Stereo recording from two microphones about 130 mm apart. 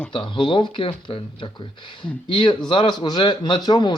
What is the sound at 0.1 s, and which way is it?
A man's voice, 40° left (ahead or behind).